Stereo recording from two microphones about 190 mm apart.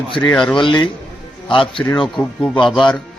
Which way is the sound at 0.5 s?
25° left (ahead or behind).